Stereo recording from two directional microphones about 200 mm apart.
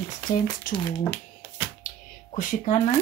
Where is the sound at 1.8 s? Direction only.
40° left (ahead or behind).